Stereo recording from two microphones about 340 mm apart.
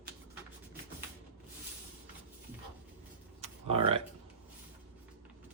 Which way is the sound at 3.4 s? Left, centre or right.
Centre.